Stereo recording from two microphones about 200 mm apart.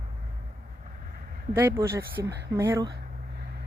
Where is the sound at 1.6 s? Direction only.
10° right (ahead or behind).